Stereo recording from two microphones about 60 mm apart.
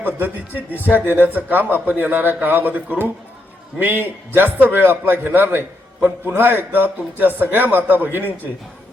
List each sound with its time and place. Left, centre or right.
0.0 s a man's voice: right